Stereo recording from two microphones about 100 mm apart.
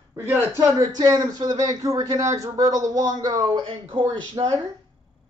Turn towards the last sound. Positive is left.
turn(degrees=-40)  # may be behind; listen again after turning